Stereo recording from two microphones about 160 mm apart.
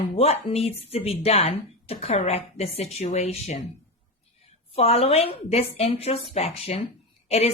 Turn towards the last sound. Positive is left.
turn(degrees=40)  # may be behind; listen again after turning